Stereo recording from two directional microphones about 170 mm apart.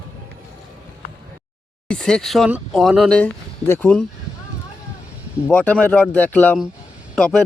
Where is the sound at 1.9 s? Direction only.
5° left (ahead or behind).